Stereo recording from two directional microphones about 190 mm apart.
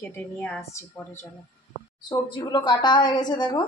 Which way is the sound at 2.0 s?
25° left (ahead or behind).